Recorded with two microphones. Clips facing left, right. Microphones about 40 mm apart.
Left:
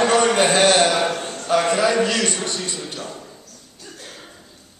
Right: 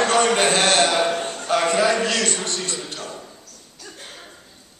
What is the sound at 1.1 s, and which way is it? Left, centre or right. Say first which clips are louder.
A man's voice: left 1 dB; centre.